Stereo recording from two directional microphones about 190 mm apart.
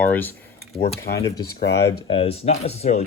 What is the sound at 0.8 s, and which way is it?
Speech, 55° left (ahead or behind).